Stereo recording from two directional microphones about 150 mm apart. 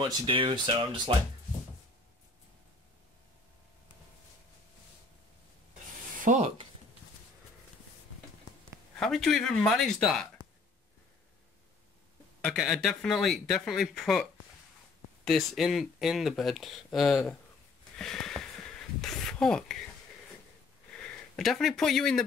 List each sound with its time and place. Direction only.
0.0 s speech: 35° right (ahead or behind)
6.2 s rub: 55° right (ahead or behind)
9.0 s speech: centre (ahead or behind)
12.4 s speech: 5° left (ahead or behind)
15.2 s speech: centre (ahead or behind)
17.9 s a sound: 5° left (ahead or behind)
21.0 s speech: centre (ahead or behind)